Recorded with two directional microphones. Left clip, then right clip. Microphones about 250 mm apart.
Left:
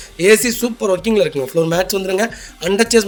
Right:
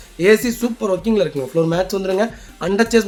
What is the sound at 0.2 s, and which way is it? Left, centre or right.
A man's voice, left.